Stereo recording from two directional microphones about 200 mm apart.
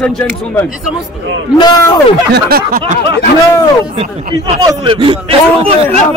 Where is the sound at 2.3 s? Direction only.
50° right (ahead or behind).